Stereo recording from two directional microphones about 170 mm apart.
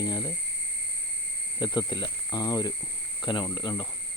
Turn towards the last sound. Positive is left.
turn(degrees=25)  # may be behind; listen again after turning